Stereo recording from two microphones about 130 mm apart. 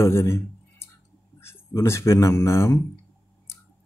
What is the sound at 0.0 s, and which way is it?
Speech, 20° left (ahead or behind).